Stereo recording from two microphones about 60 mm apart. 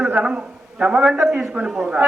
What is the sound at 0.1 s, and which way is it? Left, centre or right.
A man's voice, centre.